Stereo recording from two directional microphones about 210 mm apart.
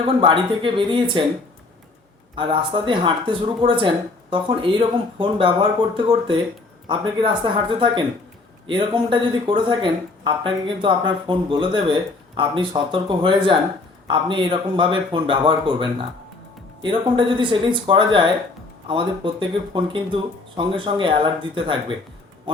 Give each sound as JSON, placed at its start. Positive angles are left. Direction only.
{"t": 0.0, "sound": "speech", "side_deg": -25}
{"t": 2.3, "sound": "speech", "side_deg": -25}